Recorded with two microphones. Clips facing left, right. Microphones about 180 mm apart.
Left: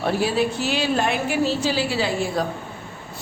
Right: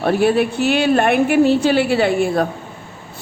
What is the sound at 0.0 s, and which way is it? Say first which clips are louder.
A woman's voice: right 6 dB; 60° right (ahead or behind).